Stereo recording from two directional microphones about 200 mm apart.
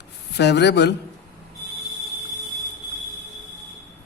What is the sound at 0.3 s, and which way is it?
Speech, 55° left (ahead or behind).